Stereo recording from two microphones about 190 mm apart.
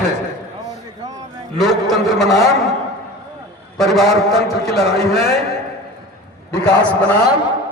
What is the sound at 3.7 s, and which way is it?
A man's voice, centre (ahead or behind).